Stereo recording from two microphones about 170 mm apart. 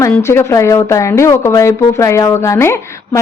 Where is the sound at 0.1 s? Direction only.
15° left (ahead or behind).